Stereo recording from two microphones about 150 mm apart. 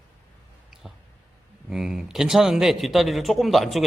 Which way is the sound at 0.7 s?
5° right (ahead or behind).